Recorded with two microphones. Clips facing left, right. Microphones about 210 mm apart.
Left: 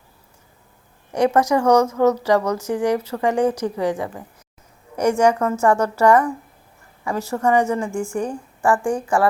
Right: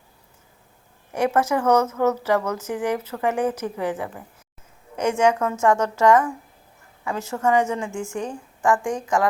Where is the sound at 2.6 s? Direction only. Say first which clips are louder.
Left 5 dB; 70° left (ahead or behind).